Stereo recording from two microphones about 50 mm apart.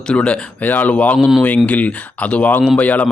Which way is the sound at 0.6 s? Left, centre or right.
Left.